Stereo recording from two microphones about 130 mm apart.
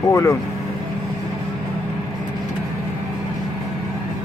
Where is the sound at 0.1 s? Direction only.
25° left (ahead or behind).